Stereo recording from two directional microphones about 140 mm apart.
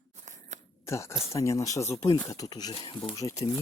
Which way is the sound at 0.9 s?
20° left (ahead or behind).